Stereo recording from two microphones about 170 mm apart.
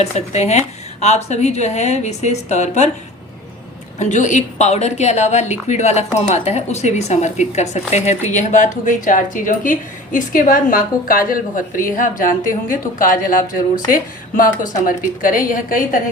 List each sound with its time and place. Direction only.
0.0 s a woman's voice: 40° left (ahead or behind)
3.9 s a woman's voice: 45° left (ahead or behind)